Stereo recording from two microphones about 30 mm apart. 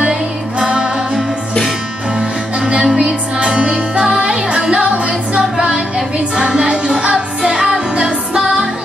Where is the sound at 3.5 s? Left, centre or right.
Right.